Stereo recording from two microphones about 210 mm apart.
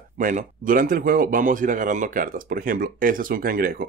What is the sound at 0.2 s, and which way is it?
Speech, 40° right (ahead or behind).